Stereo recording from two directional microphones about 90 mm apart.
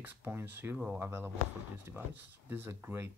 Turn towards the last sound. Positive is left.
turn(degrees=-25)  # may be behind; listen again after turning